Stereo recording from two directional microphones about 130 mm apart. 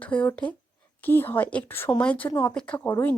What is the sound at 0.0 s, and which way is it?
Speech, 10° left (ahead or behind).